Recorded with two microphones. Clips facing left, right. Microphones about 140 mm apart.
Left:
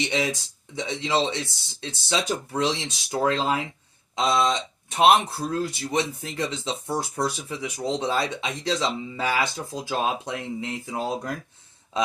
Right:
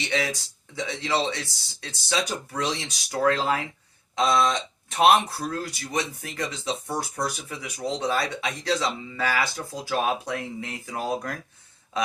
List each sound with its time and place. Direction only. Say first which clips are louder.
0.0 s speech: left 2 dB; 20° left (ahead or behind)